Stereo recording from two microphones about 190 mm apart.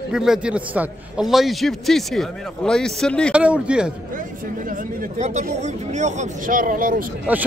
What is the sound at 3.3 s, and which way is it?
Speech, 5° right (ahead or behind).